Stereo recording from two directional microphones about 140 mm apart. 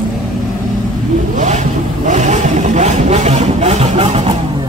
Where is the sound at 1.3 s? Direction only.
60° right (ahead or behind).